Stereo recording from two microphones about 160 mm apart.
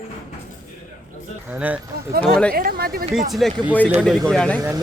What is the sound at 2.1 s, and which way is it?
Speech, 75° right (ahead or behind).